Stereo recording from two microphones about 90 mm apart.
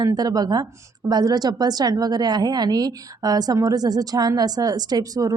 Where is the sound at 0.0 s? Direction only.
45° right (ahead or behind).